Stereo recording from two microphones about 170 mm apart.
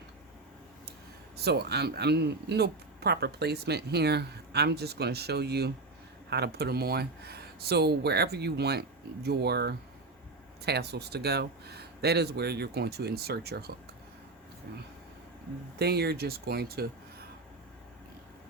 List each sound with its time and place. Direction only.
1.5 s a man's voice: 75° right (ahead or behind)
15.8 s a man's voice: 70° right (ahead or behind)